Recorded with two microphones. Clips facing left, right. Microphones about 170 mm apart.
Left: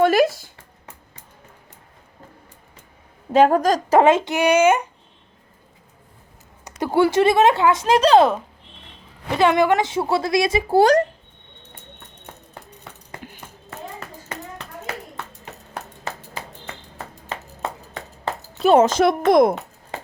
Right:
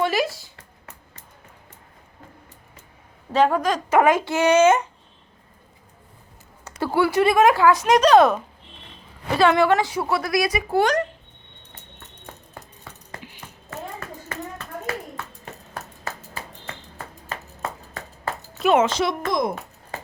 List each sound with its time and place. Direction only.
0.0 s a sound: 50° left (ahead or behind)
3.3 s speech: 45° left (ahead or behind); by 4.9 s 10° left (ahead or behind)
6.7 s speech: 20° left (ahead or behind)
9.3 s speech: 20° left (ahead or behind); by 11.0 s 35° left (ahead or behind)
15.7 s a sound: 20° left (ahead or behind)
18.6 s speech: 35° left (ahead or behind); by 19.5 s 65° left (ahead or behind)